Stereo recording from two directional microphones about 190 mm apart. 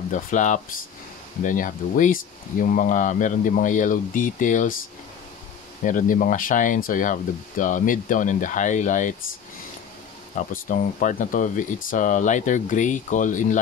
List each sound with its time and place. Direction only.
0.1 s speech: 40° left (ahead or behind)
5.9 s speech: 45° left (ahead or behind)
10.3 s speech: 45° left (ahead or behind)